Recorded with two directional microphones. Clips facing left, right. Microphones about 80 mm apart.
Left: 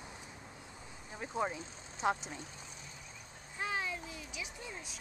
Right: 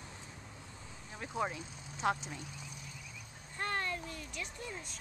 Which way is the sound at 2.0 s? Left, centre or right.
Left.